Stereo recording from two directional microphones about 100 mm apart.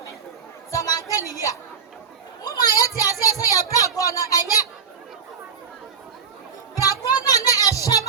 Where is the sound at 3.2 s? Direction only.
35° left (ahead or behind).